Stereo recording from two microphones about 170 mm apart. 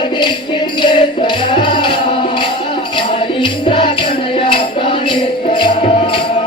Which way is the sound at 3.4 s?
30° left (ahead or behind).